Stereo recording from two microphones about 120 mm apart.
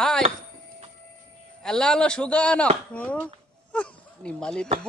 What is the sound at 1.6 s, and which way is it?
Speech, 5° left (ahead or behind).